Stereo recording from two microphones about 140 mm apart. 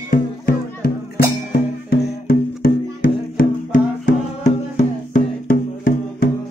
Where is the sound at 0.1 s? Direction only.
90° left.